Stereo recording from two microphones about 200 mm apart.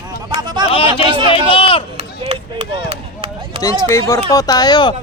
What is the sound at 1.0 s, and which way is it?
Speech, 25° right (ahead or behind).